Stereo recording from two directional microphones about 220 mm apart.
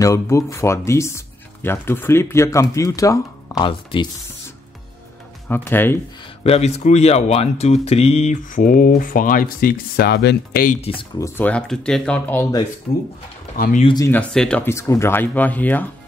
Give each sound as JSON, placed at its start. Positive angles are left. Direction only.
{"t": 0.0, "sound": "speech", "side_deg": 15}
{"t": 5.5, "sound": "speech", "side_deg": 10}
{"t": 6.2, "sound": "speech", "side_deg": 30}
{"t": 10.8, "sound": "speech", "side_deg": 25}
{"t": 13.8, "sound": "speech", "side_deg": 15}